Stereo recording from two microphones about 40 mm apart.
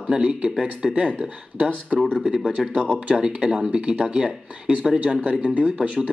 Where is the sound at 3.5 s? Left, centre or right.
Right.